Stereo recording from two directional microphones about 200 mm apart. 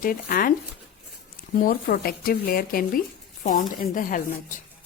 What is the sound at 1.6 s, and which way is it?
A woman's voice, 45° left (ahead or behind).